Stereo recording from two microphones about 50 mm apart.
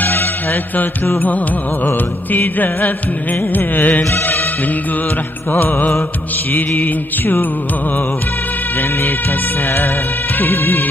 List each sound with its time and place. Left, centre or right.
0.0 s music: left
5.5 s music: left
10.4 s music: left